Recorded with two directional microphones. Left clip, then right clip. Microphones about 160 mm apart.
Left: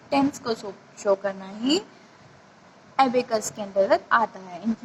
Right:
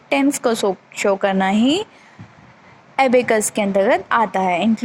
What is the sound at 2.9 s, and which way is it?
A woman's voice, 15° right (ahead or behind).